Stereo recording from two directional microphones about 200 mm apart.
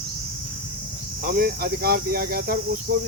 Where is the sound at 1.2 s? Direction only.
50° right (ahead or behind).